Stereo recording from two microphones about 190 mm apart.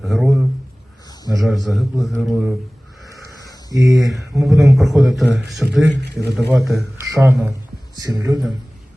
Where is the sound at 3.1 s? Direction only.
20° left (ahead or behind).